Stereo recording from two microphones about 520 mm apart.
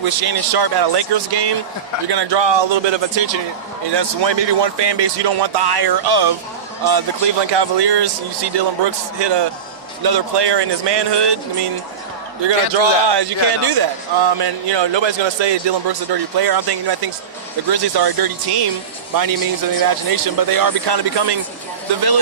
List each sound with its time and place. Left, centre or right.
0.0 s a man's voice: right
7.5 s a man's voice: right
12.5 s a man's voice: right